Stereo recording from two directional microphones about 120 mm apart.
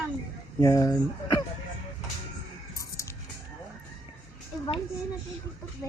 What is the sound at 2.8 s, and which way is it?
Music, 25° left (ahead or behind).